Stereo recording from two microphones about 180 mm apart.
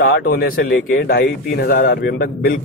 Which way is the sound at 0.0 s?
55° left (ahead or behind).